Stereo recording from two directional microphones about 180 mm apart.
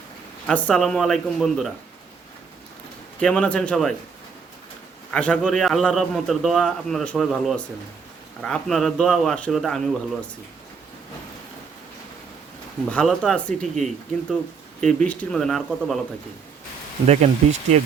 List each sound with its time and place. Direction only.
0.4 s a man's voice: 5° left (ahead or behind)
3.2 s a man's voice: 5° left (ahead or behind)
5.1 s a man's voice: 5° left (ahead or behind)
12.9 s a man's voice: 5° left (ahead or behind)
14.8 s a man's voice: 10° left (ahead or behind)
17.1 s speech: 40° right (ahead or behind)